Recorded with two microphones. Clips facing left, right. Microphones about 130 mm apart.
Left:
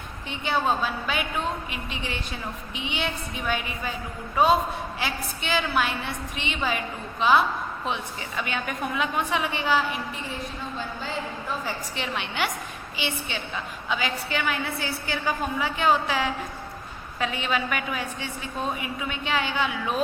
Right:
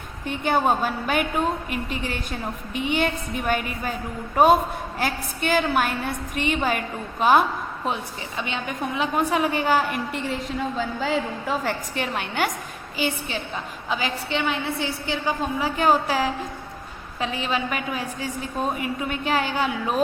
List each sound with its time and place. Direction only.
0.3 s a woman's voice: 50° right (ahead or behind)
4.9 s a woman's voice: 50° right (ahead or behind)
8.4 s a woman's voice: 25° right (ahead or behind)
9.1 s a woman's voice: 40° right (ahead or behind)
10.1 s a woman's voice: 80° right
11.9 s a woman's voice: 45° right (ahead or behind); by 15.7 s 30° right (ahead or behind)
15.8 s a woman's voice: 40° right (ahead or behind)